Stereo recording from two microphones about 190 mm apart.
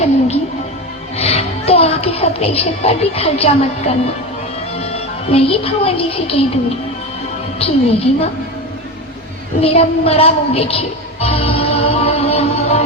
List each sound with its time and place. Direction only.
1.1 s a woman's voice: 30° left (ahead or behind)
9.6 s music: 30° left (ahead or behind)